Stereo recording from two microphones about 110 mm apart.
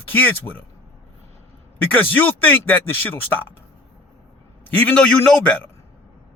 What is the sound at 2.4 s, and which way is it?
Speech, 15° left (ahead or behind).